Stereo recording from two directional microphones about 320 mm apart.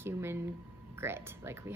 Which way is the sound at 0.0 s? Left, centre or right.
Centre.